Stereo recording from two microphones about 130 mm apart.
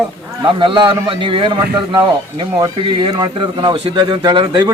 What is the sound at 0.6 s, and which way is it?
A man's voice, 40° right (ahead or behind).